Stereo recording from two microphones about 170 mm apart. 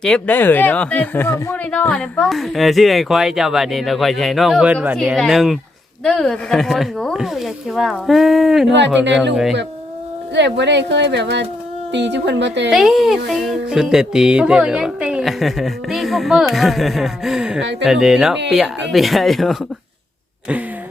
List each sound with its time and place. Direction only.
0.0 s speech: 10° left (ahead or behind)
10.3 s speech: 90° right
12.7 s speech: centre (ahead or behind)
17.6 s speech: 90° right
17.8 s speech: 5° right (ahead or behind)